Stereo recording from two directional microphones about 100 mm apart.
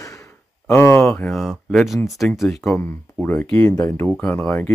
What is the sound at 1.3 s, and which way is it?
Speech, centre (ahead or behind).